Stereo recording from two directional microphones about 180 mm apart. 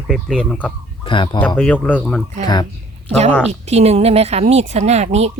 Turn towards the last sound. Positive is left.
turn(degrees=-35)  # may be behind; listen again after turning